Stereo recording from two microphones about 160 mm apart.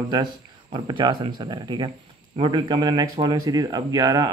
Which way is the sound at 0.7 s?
30° right (ahead or behind).